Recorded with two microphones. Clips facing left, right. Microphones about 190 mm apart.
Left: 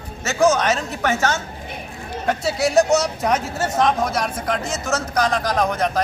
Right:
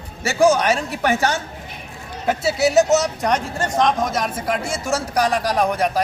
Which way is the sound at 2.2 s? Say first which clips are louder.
Right 2 dB; 5° right (ahead or behind).